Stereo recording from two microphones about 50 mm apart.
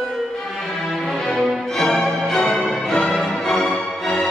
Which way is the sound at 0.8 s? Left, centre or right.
Centre.